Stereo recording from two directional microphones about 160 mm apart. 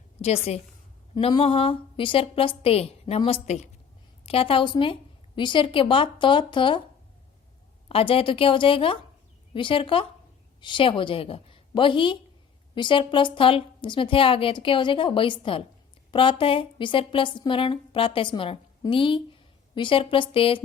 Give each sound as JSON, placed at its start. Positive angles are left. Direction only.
{"t": 0.2, "sound": "a woman's voice", "side_deg": 40}
{"t": 1.1, "sound": "a woman's voice", "side_deg": 30}
{"t": 7.9, "sound": "a woman's voice", "side_deg": 35}